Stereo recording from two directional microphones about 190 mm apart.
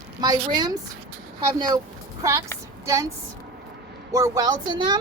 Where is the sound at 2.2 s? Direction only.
15° right (ahead or behind).